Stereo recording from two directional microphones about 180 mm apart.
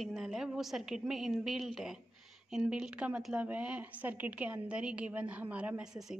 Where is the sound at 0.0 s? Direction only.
Centre (ahead or behind).